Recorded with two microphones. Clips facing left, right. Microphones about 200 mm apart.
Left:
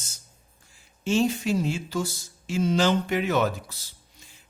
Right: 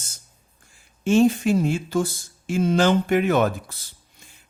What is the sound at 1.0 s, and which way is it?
Speech, 55° right (ahead or behind).